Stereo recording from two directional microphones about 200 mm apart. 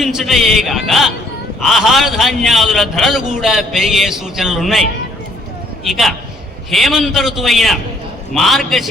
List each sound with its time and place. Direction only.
0.0 s a man's voice: centre (ahead or behind)
5.8 s a man's voice: centre (ahead or behind)